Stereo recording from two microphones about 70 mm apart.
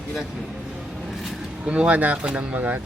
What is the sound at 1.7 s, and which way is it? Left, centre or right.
Speech, centre.